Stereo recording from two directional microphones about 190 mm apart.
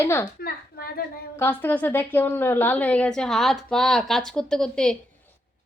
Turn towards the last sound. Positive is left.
turn(degrees=5)  # may be behind; listen again after turning